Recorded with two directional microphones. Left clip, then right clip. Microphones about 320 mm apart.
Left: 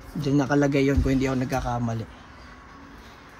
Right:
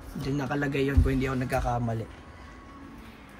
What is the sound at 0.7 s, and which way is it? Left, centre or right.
Speech, centre.